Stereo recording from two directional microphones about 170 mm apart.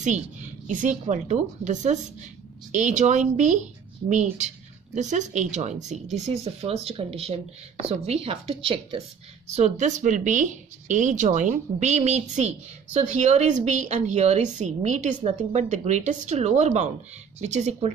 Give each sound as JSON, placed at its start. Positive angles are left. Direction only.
{"t": 0.0, "sound": "speech", "side_deg": -45}
{"t": 9.5, "sound": "speech", "side_deg": -45}